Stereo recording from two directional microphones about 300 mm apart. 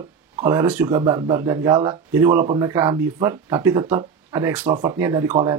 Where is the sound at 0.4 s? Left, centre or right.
Centre.